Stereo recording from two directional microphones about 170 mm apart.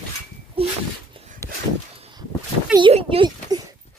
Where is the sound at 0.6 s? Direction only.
35° right (ahead or behind).